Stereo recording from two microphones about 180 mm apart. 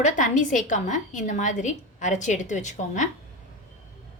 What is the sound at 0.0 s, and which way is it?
A woman's voice, 45° left (ahead or behind).